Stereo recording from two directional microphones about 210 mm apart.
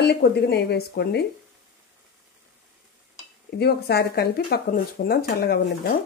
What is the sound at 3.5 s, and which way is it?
Speech, 50° left (ahead or behind).